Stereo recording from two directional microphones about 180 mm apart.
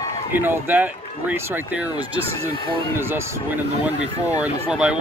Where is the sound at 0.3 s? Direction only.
10° right (ahead or behind).